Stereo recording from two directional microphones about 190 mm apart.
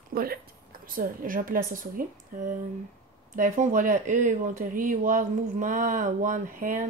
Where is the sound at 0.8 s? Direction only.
45° right (ahead or behind).